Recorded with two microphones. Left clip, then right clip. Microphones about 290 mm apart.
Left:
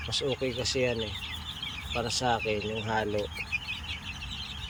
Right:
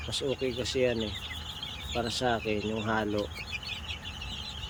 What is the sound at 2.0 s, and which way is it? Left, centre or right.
Speech, centre.